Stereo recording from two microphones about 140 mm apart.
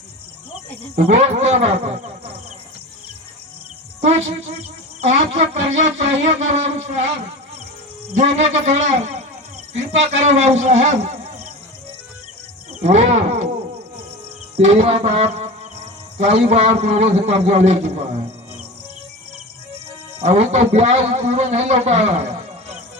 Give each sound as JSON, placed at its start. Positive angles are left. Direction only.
{"t": 0.9, "sound": "a man's voice", "side_deg": -50}
{"t": 4.9, "sound": "a man's voice", "side_deg": -55}
{"t": 8.1, "sound": "a man's voice", "side_deg": -55}
{"t": 10.2, "sound": "a man's voice", "side_deg": -55}
{"t": 12.8, "sound": "speech", "side_deg": -50}
{"t": 14.5, "sound": "music", "side_deg": -50}
{"t": 20.1, "sound": "a man's voice", "side_deg": -50}